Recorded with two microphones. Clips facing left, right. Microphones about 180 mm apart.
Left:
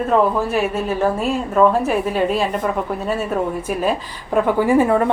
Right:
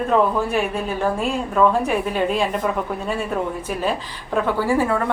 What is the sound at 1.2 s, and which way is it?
A woman's voice, 5° left (ahead or behind).